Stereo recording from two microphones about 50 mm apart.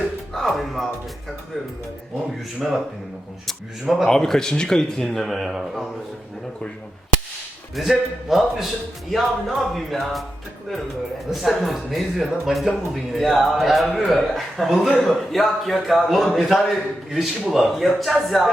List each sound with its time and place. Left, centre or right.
0.3 s speech: centre
2.6 s a man's voice: centre
5.4 s speech: centre
7.8 s a man's voice: centre
11.3 s a man's voice: centre